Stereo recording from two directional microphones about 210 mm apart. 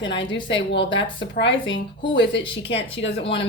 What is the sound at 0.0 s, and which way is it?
Speech, 60° left (ahead or behind).